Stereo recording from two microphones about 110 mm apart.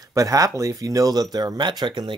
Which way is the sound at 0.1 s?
30° right (ahead or behind).